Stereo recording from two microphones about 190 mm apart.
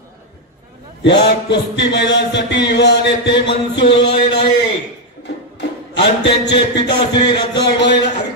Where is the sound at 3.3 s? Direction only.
25° left (ahead or behind).